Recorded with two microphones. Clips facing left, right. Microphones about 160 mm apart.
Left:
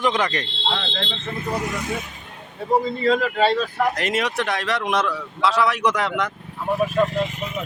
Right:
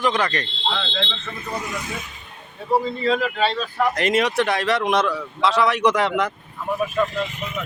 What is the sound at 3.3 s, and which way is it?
Speech, 40° left (ahead or behind).